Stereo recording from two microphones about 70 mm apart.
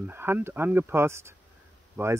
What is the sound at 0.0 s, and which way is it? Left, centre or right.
Speech, right.